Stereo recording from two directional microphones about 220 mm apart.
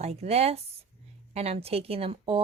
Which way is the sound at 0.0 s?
30° right (ahead or behind).